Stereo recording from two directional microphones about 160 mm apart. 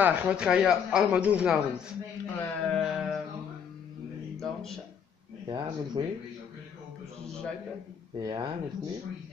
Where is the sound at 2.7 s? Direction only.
Centre (ahead or behind).